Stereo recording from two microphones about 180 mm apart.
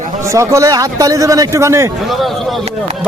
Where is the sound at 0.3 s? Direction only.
15° right (ahead or behind).